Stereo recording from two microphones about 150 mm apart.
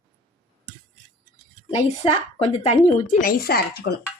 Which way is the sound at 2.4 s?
45° left (ahead or behind).